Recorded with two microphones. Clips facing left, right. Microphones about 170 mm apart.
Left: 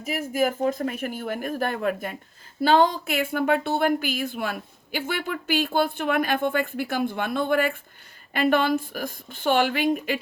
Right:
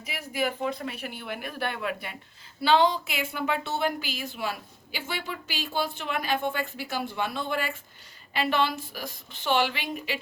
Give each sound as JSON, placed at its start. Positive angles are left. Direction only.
{"t": 0.0, "sound": "speech", "side_deg": 45}